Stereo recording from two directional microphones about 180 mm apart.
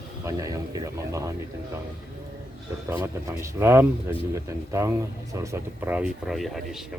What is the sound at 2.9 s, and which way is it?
Speech, 15° right (ahead or behind).